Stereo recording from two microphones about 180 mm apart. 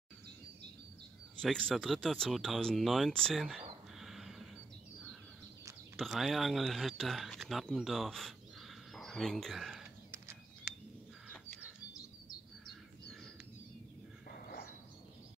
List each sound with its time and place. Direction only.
1.4 s speech: 5° left (ahead or behind)
4.0 s a sound: centre (ahead or behind)
5.9 s speech: centre (ahead or behind)
10.1 s bird: 15° right (ahead or behind)